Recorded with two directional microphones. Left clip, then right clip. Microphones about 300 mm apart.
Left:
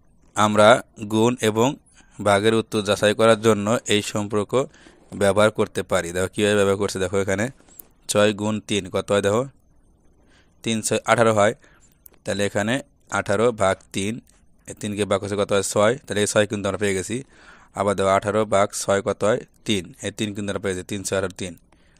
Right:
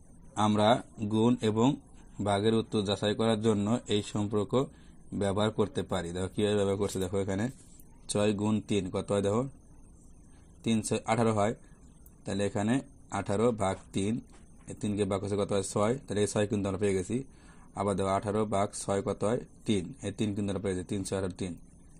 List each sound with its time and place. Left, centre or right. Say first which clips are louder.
0.4 s speech: left 11 dB; left
10.6 s speech: left 8 dB; left